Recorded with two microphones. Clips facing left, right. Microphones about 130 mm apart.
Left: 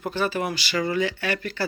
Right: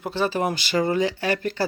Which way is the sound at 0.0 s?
30° right (ahead or behind).